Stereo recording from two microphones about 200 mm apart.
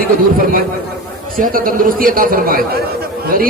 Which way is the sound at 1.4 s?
45° right (ahead or behind).